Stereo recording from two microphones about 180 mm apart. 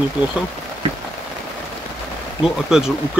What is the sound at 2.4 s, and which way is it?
Speech, 5° right (ahead or behind).